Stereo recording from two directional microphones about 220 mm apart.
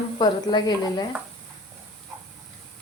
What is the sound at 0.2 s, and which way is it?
Speech, 20° left (ahead or behind).